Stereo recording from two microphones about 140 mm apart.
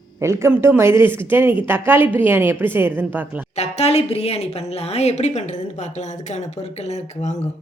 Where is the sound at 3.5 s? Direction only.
50° left (ahead or behind).